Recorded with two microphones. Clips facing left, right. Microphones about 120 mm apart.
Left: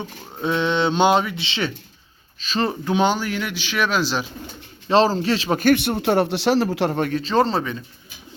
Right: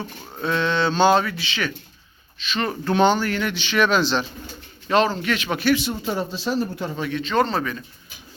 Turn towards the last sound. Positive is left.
turn(degrees=25)  # may be behind; listen again after turning